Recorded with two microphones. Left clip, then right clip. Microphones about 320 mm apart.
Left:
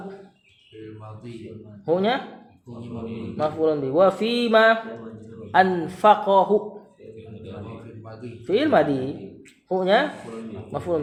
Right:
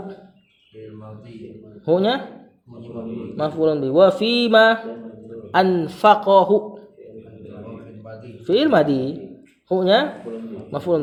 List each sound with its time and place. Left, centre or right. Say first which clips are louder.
1.8 s speech: right 3 dB; right
3.3 s speech: right 2 dB; right
8.4 s speech: right 3 dB; right